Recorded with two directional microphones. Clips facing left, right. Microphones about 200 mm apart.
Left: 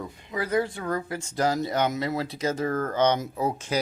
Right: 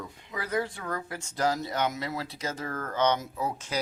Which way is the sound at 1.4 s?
15° left (ahead or behind).